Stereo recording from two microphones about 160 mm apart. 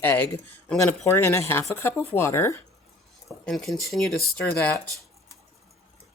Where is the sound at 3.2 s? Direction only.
Centre (ahead or behind).